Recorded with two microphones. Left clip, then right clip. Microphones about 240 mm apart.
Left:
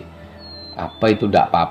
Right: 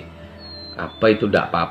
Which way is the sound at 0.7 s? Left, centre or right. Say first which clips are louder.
Right 1 dB; left.